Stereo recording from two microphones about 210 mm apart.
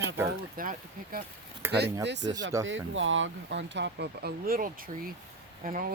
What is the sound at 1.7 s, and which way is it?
Speech, 55° right (ahead or behind).